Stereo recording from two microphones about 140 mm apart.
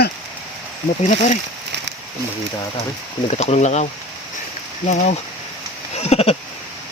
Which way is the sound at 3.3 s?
50° left (ahead or behind).